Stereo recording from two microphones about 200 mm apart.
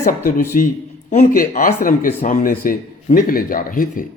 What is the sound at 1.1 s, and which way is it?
Speech, 40° left (ahead or behind).